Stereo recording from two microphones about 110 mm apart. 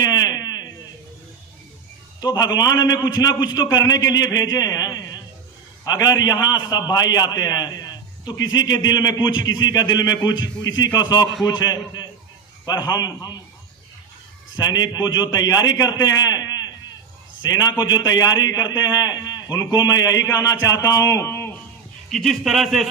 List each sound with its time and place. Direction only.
0.0 s a sound: 35° left (ahead or behind)
2.2 s a man's voice: 35° left (ahead or behind)
14.5 s a man's voice: 35° left (ahead or behind)
22.1 s speech: centre (ahead or behind)